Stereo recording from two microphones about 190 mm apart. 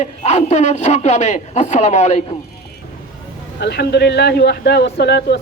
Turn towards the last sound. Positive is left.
turn(degrees=60)  # may be behind; listen again after turning